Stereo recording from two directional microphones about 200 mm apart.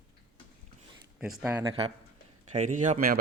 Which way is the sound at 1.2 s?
5° right (ahead or behind).